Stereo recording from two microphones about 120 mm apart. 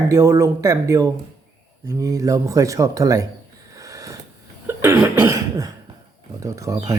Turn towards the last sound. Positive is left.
turn(degrees=-30)  # may be behind; listen again after turning